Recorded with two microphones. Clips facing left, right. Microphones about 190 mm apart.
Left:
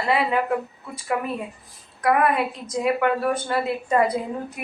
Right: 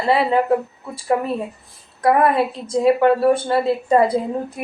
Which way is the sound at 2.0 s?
30° right (ahead or behind).